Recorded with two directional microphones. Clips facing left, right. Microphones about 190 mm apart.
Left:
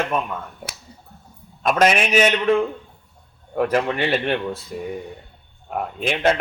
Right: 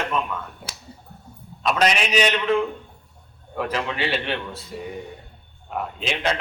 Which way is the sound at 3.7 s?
50° left (ahead or behind).